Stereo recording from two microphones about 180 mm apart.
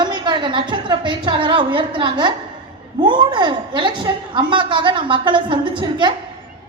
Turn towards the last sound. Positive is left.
turn(degrees=-25)  # may be behind; listen again after turning